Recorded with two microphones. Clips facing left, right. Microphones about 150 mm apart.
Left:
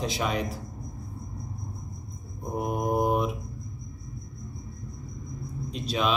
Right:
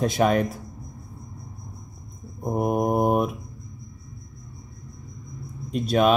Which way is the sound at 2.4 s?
50° right (ahead or behind).